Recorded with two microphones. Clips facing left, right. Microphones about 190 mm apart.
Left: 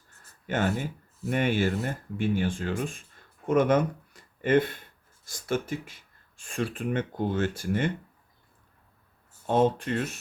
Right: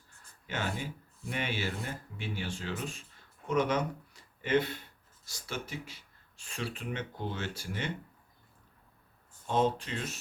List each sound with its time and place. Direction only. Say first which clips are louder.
0.4 s speech: left 8 dB; 50° left (ahead or behind)
9.5 s speech: left 6 dB; 55° left (ahead or behind)